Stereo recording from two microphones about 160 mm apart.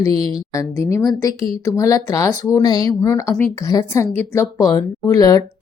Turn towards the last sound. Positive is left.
turn(degrees=20)  # may be behind; listen again after turning